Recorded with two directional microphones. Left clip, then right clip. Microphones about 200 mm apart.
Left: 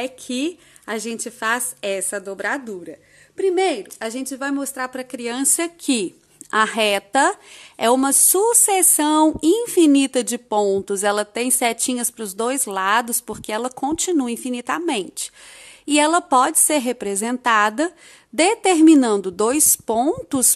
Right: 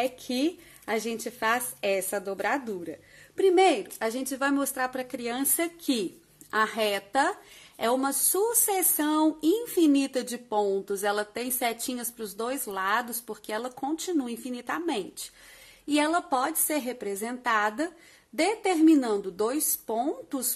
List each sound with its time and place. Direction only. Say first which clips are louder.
0.0 s a woman's voice: left 3 dB; 25° left (ahead or behind); by 20.4 s 45° left (ahead or behind)